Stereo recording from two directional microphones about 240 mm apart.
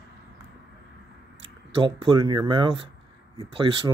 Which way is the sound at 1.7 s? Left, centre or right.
Right.